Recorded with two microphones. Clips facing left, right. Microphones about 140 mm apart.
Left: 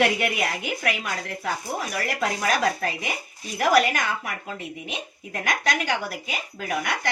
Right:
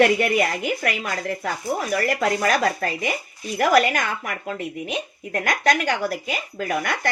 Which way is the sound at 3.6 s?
45° right (ahead or behind).